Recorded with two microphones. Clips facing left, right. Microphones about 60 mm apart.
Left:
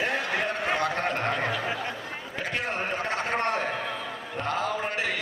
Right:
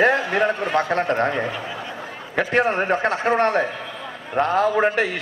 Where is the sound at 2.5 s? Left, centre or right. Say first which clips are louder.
Right 11 dB; right.